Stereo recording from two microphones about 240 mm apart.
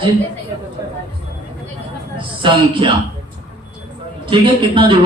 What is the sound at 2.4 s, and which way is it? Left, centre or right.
Speech, right.